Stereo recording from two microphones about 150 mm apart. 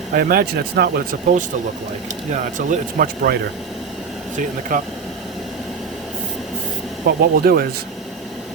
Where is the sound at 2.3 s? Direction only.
60° right (ahead or behind).